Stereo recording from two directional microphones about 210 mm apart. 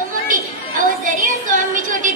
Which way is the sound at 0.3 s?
40° right (ahead or behind).